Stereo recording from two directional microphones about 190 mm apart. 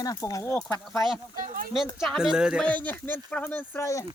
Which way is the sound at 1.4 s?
45° right (ahead or behind).